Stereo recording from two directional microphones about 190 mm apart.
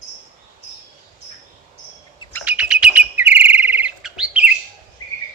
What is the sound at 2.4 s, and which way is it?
Chirp, 5° right (ahead or behind).